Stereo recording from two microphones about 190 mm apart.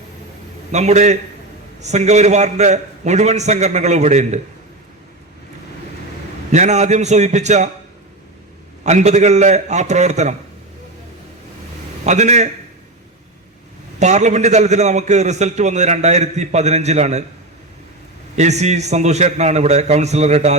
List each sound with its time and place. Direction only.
0.7 s a man's voice: 35° right (ahead or behind)
6.5 s a man's voice: 40° right (ahead or behind)
8.8 s a man's voice: 40° right (ahead or behind)
12.0 s a man's voice: 35° right (ahead or behind)
14.0 s a man's voice: 40° right (ahead or behind)
18.3 s a man's voice: 35° right (ahead or behind)